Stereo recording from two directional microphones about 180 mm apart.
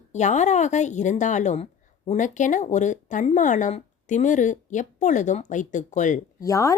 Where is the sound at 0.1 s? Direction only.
40° left (ahead or behind).